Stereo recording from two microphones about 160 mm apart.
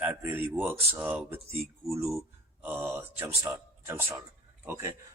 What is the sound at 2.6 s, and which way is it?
Speech, 15° right (ahead or behind).